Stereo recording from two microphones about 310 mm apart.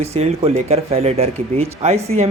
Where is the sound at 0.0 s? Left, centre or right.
Centre.